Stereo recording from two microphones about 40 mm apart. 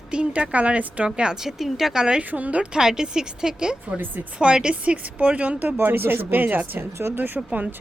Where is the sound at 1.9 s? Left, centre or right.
Right.